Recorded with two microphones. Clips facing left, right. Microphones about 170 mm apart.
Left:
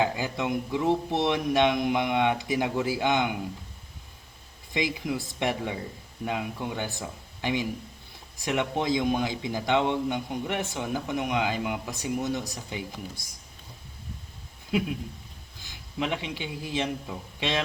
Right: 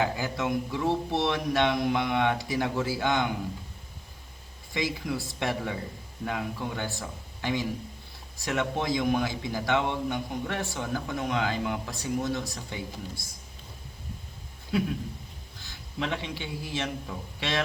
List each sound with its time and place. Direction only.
0.0 s a man's voice: 20° left (ahead or behind)
4.7 s a man's voice: 20° left (ahead or behind)
14.7 s a man's voice: 15° left (ahead or behind)